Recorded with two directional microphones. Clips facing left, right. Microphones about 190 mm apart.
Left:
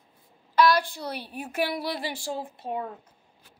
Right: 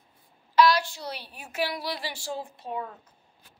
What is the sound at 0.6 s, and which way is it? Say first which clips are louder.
A woman's voice: even; 55° left (ahead or behind).